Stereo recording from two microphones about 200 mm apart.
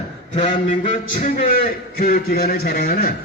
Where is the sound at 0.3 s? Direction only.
35° left (ahead or behind).